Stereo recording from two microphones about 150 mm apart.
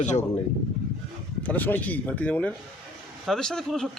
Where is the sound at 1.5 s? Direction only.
10° left (ahead or behind).